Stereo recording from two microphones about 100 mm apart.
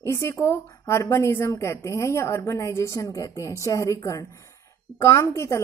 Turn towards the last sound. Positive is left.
turn(degrees=30)  # may be behind; listen again after turning